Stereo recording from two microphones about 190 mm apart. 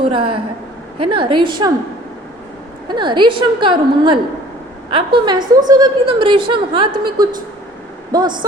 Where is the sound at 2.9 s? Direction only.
25° right (ahead or behind).